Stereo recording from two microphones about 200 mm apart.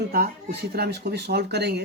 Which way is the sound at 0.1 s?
45° right (ahead or behind).